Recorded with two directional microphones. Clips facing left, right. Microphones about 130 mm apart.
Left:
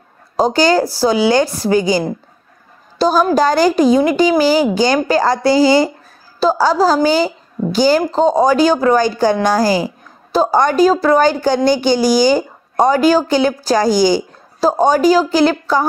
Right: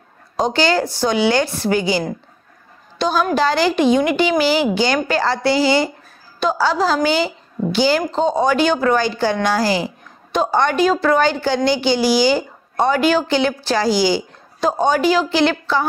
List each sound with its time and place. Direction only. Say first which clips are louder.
0.4 s a woman's voice: left 4 dB; 40° left (ahead or behind)